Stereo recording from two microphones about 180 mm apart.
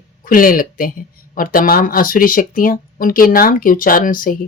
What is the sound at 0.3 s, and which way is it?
Speech, 50° left (ahead or behind).